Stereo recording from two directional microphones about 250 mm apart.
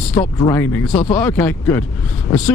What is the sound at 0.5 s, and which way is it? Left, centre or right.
Speech, centre.